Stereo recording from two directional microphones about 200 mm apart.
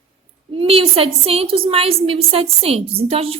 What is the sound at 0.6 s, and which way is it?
A woman's voice, 30° right (ahead or behind).